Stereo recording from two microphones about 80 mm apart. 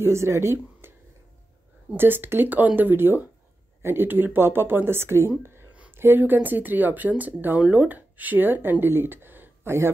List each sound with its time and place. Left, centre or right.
0.0 s a woman's voice: right
2.0 s speech: right
5.4 s a sound: right
5.9 s speech: right